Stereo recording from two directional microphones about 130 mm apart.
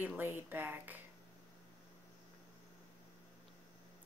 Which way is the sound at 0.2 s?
15° right (ahead or behind).